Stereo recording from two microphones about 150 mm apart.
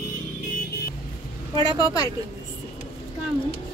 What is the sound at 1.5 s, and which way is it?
Speech, 25° left (ahead or behind).